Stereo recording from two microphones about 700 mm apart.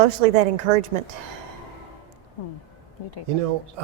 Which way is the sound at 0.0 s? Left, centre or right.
Right.